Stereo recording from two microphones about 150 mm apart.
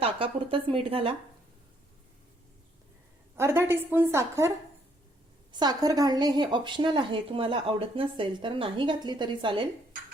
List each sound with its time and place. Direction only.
0.0 s speech: 35° right (ahead or behind)
3.3 s a woman's voice: 15° right (ahead or behind); by 9.6 s 35° right (ahead or behind)